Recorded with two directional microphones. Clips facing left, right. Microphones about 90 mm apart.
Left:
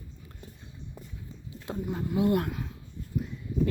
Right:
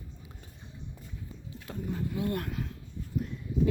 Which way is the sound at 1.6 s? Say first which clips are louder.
Left 3 dB; 30° left (ahead or behind).